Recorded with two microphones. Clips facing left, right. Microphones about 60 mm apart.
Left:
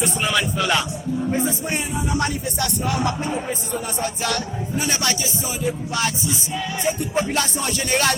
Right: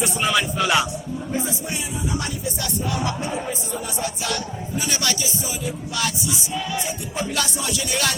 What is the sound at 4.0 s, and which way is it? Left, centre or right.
Music, left.